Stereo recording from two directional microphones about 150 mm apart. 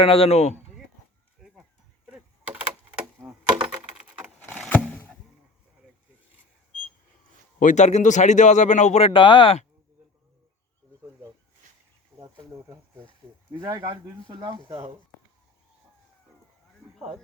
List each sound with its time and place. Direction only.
0.0 s speech: 40° left (ahead or behind)
1.4 s a sound: centre (ahead or behind)
3.2 s typing: 5° right (ahead or behind)
3.9 s wood: 10° right (ahead or behind)
4.4 s a sound: 10° left (ahead or behind)
7.6 s speech: 55° left (ahead or behind); by 9.6 s 35° left (ahead or behind)
12.1 s cricket: 15° right (ahead or behind)
13.2 s snake: 15° right (ahead or behind)
13.6 s speech: 25° right (ahead or behind)